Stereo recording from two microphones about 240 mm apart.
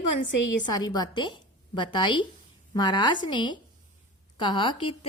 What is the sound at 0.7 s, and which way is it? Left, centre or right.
A woman's voice, centre.